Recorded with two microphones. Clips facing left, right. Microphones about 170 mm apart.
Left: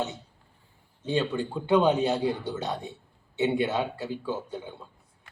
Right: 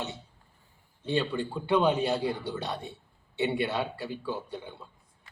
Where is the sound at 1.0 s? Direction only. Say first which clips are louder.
Left 2 dB; 20° left (ahead or behind).